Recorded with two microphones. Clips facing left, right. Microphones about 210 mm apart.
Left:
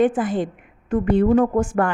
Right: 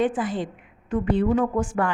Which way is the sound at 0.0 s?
50° left (ahead or behind).